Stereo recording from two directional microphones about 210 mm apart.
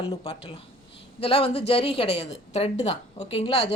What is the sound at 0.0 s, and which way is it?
A woman's voice, 30° left (ahead or behind).